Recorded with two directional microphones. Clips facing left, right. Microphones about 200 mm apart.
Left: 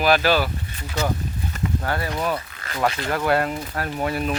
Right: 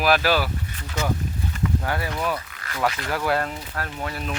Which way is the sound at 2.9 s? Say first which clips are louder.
Left 3 dB; 30° left (ahead or behind).